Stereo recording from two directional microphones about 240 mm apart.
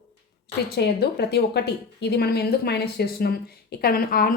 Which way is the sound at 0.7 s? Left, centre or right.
Left.